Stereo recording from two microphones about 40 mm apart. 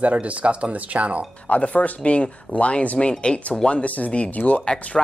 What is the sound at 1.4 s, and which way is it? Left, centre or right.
Speech, left.